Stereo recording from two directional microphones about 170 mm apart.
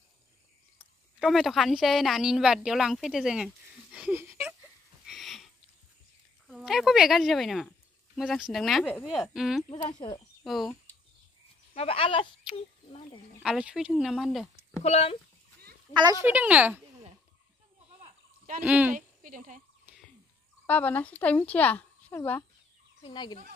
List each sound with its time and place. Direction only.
0.7 s a woman's voice: centre (ahead or behind)
5.0 s a sound: centre (ahead or behind)
6.4 s speech: 5° right (ahead or behind)
9.9 s speech: 25° left (ahead or behind)
10.4 s speech: centre (ahead or behind)
11.7 s speech: 35° left (ahead or behind)
13.4 s speech: 5° right (ahead or behind)
14.5 s speech: 40° left (ahead or behind)
15.9 s speech: 25° right (ahead or behind)
16.3 s speech: 10° right (ahead or behind)
18.6 s speech: 10° right (ahead or behind)
18.9 s a woman's voice: 50° right (ahead or behind)
20.6 s speech: 10° left (ahead or behind)
23.0 s speech: 25° left (ahead or behind)